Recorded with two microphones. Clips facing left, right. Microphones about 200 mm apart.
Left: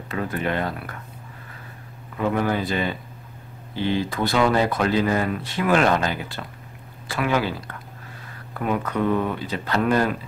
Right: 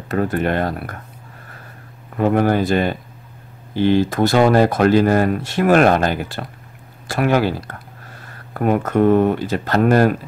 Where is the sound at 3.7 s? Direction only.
80° right.